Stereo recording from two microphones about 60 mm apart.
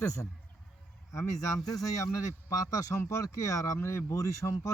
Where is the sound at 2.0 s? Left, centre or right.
Left.